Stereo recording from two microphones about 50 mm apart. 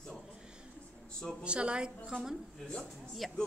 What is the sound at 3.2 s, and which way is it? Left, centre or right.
Speech, centre.